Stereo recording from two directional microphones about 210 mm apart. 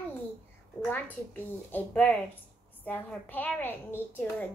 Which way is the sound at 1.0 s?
10° left (ahead or behind).